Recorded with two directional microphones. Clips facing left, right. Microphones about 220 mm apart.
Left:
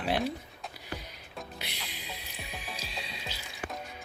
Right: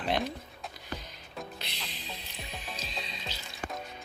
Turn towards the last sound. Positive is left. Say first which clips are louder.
# right 1 dB
turn(degrees=10)  # may be behind; listen again after turning